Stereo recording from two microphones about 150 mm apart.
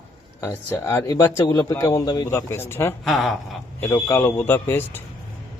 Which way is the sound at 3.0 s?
Centre (ahead or behind).